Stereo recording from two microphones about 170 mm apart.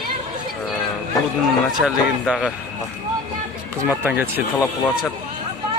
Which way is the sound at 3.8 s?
10° right (ahead or behind).